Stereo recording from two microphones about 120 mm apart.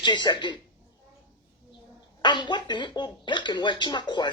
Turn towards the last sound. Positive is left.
turn(degrees=40)  # may be behind; listen again after turning